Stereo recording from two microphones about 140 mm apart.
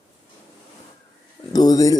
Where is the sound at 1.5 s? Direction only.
25° left (ahead or behind).